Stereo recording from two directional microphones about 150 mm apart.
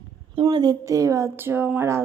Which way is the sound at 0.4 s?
25° right (ahead or behind).